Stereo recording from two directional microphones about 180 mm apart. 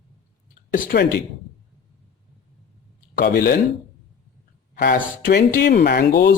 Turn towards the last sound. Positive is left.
turn(degrees=60)  # may be behind; listen again after turning